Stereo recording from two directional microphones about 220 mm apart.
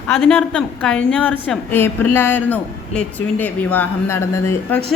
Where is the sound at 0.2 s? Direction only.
5° left (ahead or behind).